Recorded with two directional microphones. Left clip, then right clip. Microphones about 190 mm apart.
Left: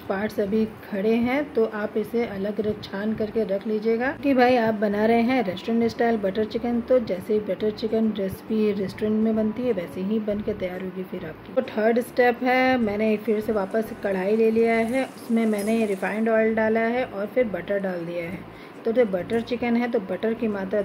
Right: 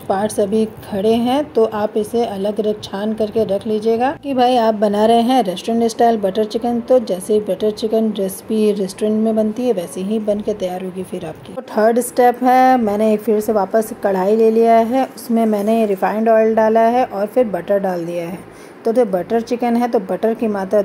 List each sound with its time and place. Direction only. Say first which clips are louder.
0.1 s a woman's voice: right 9 dB; 15° right (ahead or behind)